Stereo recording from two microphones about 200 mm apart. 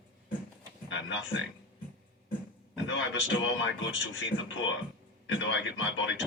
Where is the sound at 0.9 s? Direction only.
70° left (ahead or behind).